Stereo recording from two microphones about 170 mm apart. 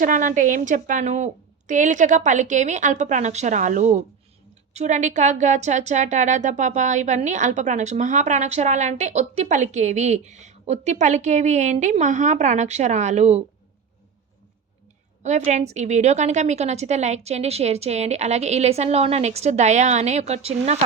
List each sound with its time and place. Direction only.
0.0 s speech: 50° right (ahead or behind)
15.2 s a woman's voice: 45° right (ahead or behind)